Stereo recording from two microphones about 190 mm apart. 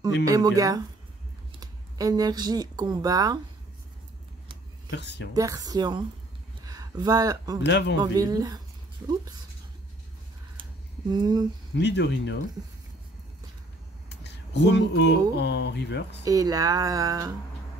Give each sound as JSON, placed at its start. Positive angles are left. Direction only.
{"t": 0.2, "sound": "speech", "side_deg": -20}
{"t": 4.9, "sound": "speech", "side_deg": 65}
{"t": 5.3, "sound": "speech", "side_deg": -20}
{"t": 7.6, "sound": "speech", "side_deg": 65}
{"t": 8.0, "sound": "speech", "side_deg": -20}
{"t": 10.6, "sound": "a sound", "side_deg": -20}
{"t": 11.7, "sound": "speech", "side_deg": 65}
{"t": 14.0, "sound": "speech", "side_deg": 65}
{"t": 16.3, "sound": "speech", "side_deg": -20}